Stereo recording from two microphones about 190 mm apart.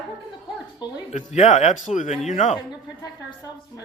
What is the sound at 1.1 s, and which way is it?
Speech, 40° left (ahead or behind).